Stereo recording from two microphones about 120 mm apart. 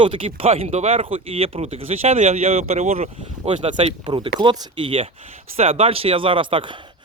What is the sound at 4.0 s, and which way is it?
Speech, 40° right (ahead or behind).